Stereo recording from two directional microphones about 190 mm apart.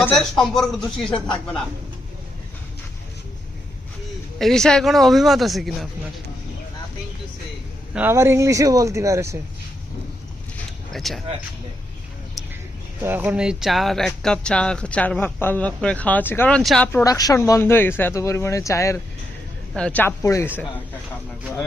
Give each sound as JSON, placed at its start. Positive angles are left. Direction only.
{"t": 0.0, "sound": "a man's voice", "side_deg": 5}
{"t": 4.4, "sound": "a man's voice", "side_deg": 0}
{"t": 7.9, "sound": "speech", "side_deg": -10}
{"t": 10.9, "sound": "a man's voice", "side_deg": 0}
{"t": 13.0, "sound": "speech", "side_deg": -10}